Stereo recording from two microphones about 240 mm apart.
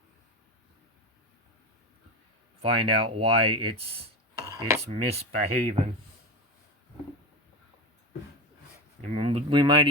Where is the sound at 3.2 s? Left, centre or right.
Right.